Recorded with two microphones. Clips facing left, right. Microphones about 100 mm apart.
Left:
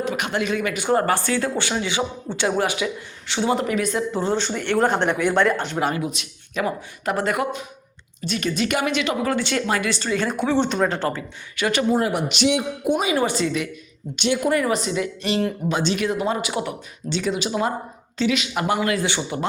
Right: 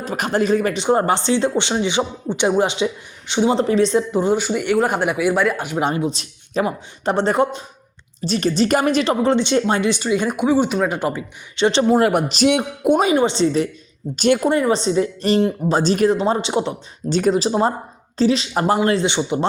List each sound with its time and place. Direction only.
0.0 s speech: 40° right (ahead or behind)
0.8 s speech: 20° right (ahead or behind)
5.7 s speech: 25° right (ahead or behind)
11.5 s speech: 25° right (ahead or behind)
11.9 s speech: 60° right (ahead or behind)
13.1 s speech: 25° right (ahead or behind); by 16.1 s 40° right (ahead or behind)
16.1 s speech: 30° right (ahead or behind)
17.1 s speech: 45° right (ahead or behind); by 19.5 s 20° right (ahead or behind)